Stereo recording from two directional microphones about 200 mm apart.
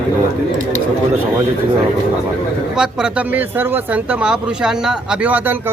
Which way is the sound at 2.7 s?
5° right (ahead or behind).